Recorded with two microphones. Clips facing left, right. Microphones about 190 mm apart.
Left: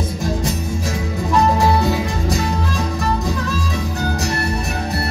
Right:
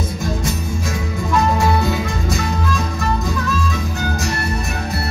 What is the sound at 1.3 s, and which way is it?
Music, 35° left (ahead or behind).